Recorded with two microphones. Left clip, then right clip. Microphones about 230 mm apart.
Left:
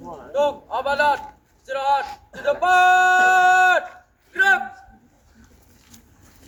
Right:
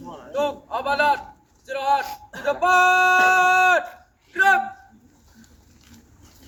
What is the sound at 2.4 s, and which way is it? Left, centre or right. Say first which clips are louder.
Speech: left 1 dB; centre.